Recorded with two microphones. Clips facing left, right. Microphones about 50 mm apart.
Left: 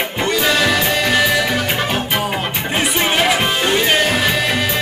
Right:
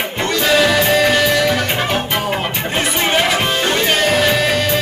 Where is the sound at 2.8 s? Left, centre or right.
Centre.